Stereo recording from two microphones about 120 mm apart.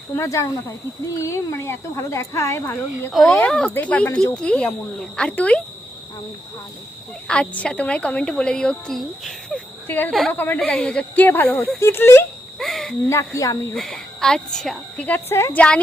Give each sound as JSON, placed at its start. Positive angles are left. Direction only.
{"t": 0.2, "sound": "speech", "side_deg": 25}
{"t": 3.1, "sound": "a woman's voice", "side_deg": 0}
{"t": 7.3, "sound": "a woman's voice", "side_deg": 10}
{"t": 9.8, "sound": "speech", "side_deg": 15}
{"t": 10.1, "sound": "a woman's voice", "side_deg": 5}
{"t": 10.3, "sound": "a woman's voice", "side_deg": 15}
{"t": 12.5, "sound": "cricket", "side_deg": 0}
{"t": 13.1, "sound": "speech", "side_deg": 25}
{"t": 13.7, "sound": "a woman's voice", "side_deg": 5}
{"t": 15.5, "sound": "a woman's voice", "side_deg": 10}